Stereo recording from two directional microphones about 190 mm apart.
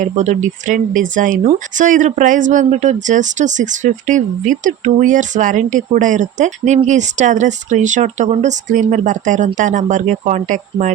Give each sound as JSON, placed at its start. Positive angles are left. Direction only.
{"t": 0.0, "sound": "speech", "side_deg": -40}